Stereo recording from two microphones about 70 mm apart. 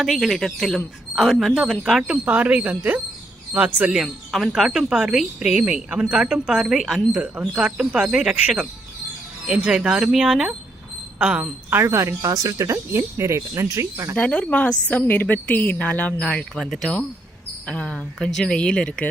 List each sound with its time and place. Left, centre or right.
0.0 s speech: centre
2.0 s speech: right
3.9 s speech: centre
7.1 s speech: centre
11.7 s speech: right
12.2 s speech: right
14.2 s a woman's voice: centre
16.6 s speech: centre